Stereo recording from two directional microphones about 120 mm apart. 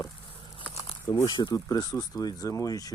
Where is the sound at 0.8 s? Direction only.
25° left (ahead or behind).